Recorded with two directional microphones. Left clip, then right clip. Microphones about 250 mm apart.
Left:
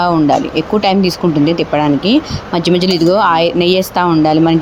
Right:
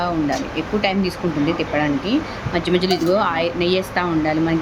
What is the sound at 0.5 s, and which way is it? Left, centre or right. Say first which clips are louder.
Speech: left 8 dB; left.